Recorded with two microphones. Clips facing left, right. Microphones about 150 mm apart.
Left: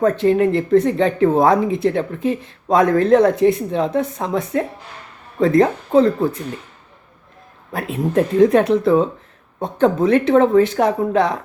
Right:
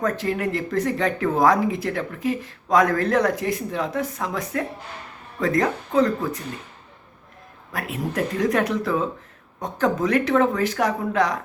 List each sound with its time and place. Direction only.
0.0 s speech: 25° left (ahead or behind)
7.7 s speech: 25° left (ahead or behind)